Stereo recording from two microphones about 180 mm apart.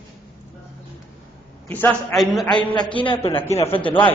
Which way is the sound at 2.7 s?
25° left (ahead or behind).